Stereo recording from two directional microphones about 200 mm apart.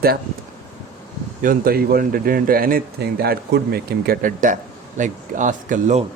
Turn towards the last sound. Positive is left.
turn(degrees=-35)  # may be behind; listen again after turning